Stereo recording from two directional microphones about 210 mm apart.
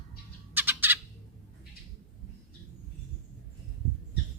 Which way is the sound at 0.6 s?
10° right (ahead or behind).